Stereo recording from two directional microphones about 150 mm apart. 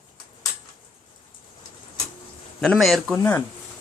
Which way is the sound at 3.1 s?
15° left (ahead or behind).